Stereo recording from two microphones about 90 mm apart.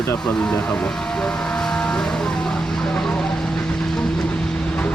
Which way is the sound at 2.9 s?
5° left (ahead or behind).